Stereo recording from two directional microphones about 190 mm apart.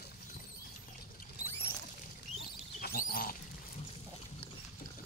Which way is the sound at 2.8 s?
50° left (ahead or behind).